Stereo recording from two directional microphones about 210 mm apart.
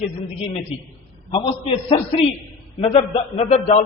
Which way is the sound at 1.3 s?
25° left (ahead or behind).